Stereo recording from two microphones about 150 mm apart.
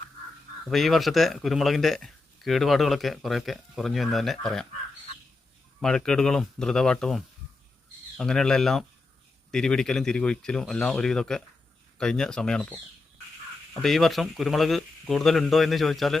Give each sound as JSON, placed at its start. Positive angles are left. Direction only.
{"t": 0.7, "sound": "speech", "side_deg": 0}
{"t": 5.8, "sound": "speech", "side_deg": 5}
{"t": 8.2, "sound": "speech", "side_deg": 5}
{"t": 13.8, "sound": "speech", "side_deg": 0}